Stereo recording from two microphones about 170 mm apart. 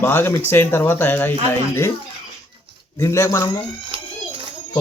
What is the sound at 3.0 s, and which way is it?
Speech, 15° left (ahead or behind).